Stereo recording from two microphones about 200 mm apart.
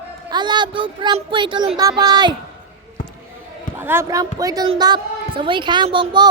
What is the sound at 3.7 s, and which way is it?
Speech, 10° right (ahead or behind).